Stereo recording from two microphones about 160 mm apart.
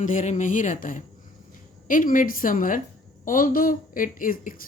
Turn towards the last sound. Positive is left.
turn(degrees=60)  # may be behind; listen again after turning